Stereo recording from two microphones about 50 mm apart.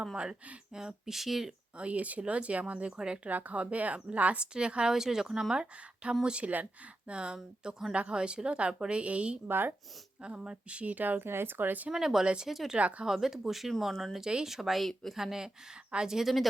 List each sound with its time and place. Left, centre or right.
0.7 s speech: centre
1.7 s speech: right
2.9 s speech: centre
3.2 s speech: right
9.5 s speech: right
10.2 s speech: right
11.2 s speech: right
11.9 s speech: centre
12.2 s speech: centre
12.5 s speech: centre
12.7 s speech: right
13.1 s speech: centre
15.2 s speech: centre